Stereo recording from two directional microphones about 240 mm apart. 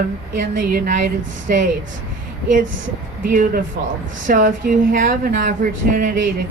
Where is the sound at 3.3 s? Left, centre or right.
Right.